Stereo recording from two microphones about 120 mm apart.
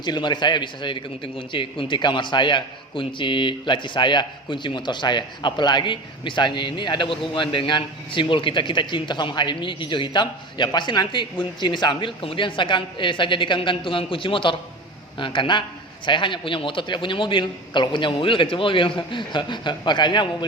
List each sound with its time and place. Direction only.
0.0 s a man's voice: 40° left (ahead or behind)